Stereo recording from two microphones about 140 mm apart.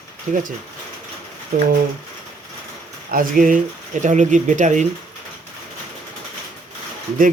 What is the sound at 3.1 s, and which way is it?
Speech, 80° right.